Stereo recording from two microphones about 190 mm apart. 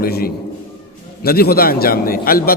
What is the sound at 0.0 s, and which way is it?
A man's voice, 55° left (ahead or behind).